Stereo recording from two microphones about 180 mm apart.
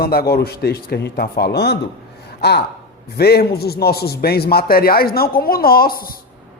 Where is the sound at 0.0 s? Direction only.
60° left (ahead or behind).